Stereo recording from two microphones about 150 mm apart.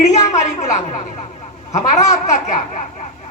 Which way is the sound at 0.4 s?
50° left (ahead or behind).